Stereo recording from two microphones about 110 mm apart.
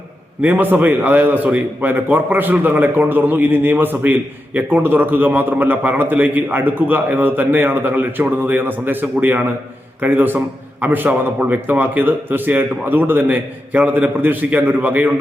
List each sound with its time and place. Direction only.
0.4 s a man's voice: 15° right (ahead or behind)